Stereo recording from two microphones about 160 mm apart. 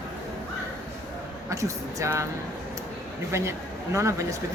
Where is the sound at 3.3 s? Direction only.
15° right (ahead or behind).